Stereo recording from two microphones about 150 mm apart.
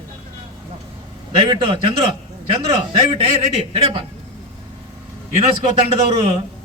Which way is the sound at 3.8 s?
40° right (ahead or behind).